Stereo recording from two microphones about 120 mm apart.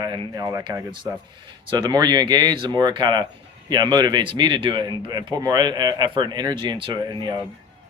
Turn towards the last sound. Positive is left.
turn(degrees=-40)  # may be behind; listen again after turning